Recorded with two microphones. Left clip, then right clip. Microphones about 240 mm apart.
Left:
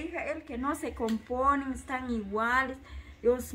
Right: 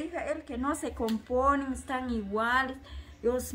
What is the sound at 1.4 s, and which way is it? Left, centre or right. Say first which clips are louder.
A woman's voice: right 1 dB; centre.